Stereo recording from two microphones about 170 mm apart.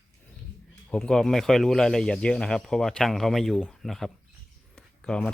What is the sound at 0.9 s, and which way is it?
Speech, 5° left (ahead or behind).